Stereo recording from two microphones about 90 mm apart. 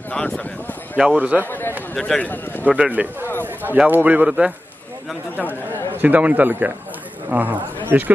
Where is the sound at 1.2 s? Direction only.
15° right (ahead or behind).